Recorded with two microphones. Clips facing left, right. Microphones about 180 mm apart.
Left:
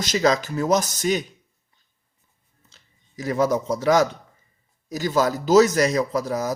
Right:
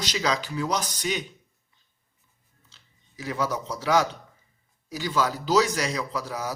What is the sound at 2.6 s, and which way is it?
Speech, 45° left (ahead or behind).